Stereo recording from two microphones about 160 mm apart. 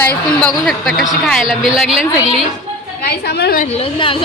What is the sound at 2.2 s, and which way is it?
Speech, 35° right (ahead or behind).